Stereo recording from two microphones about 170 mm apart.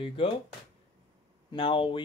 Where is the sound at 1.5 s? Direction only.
30° left (ahead or behind).